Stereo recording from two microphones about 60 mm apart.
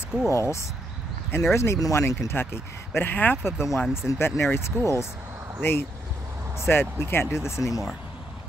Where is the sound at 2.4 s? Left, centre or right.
Left.